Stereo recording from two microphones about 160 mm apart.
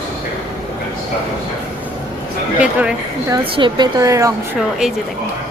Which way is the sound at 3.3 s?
30° right (ahead or behind).